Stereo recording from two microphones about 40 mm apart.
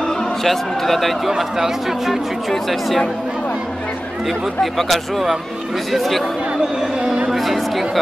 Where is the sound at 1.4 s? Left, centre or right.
Centre.